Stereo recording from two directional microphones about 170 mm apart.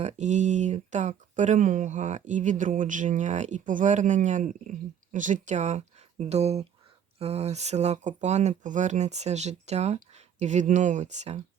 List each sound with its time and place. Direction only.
0.0 s speech: 45° right (ahead or behind)